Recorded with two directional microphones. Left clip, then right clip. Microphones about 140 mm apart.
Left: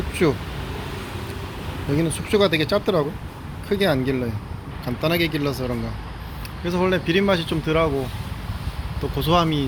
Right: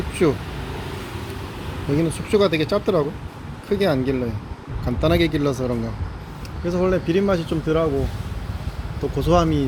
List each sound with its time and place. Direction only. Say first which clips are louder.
0.1 s vehicle: right 1 dB; 10° right (ahead or behind)
1.9 s speech: right 1 dB; 10° right (ahead or behind)
4.9 s speech: right 2 dB; 25° right (ahead or behind)
6.7 s speech: right 1 dB; centre (ahead or behind)
9.1 s speech: right 1 dB; 15° right (ahead or behind)